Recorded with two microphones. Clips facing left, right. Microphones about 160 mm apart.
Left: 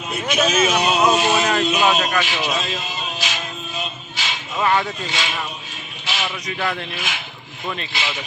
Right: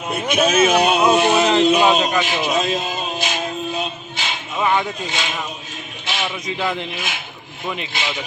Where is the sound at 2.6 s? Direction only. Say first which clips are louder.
Right 6 dB; 50° right (ahead or behind).